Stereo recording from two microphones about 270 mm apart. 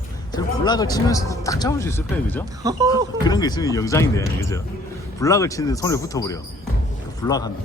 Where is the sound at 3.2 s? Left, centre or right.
Centre.